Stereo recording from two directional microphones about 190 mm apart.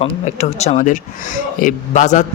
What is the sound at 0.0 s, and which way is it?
A man's voice, 35° left (ahead or behind).